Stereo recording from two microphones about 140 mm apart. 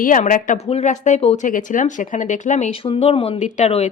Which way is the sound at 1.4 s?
70° left (ahead or behind).